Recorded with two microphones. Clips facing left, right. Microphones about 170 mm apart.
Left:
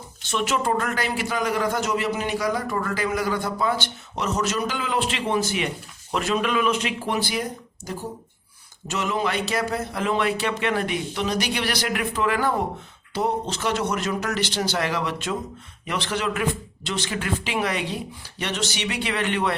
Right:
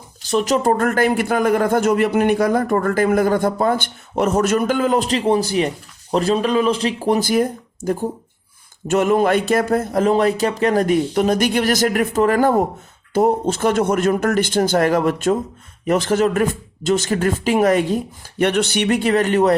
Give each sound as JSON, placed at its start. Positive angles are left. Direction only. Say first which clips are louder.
{"t": 0.2, "sound": "speech", "louder": "right 7 dB", "side_deg": -35}